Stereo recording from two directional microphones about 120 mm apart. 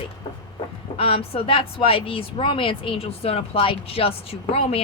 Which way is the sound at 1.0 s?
50° left (ahead or behind).